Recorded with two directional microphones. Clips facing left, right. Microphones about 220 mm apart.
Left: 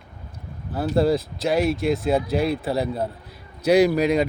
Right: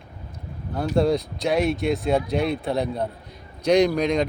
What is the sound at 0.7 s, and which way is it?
Speech, 5° left (ahead or behind).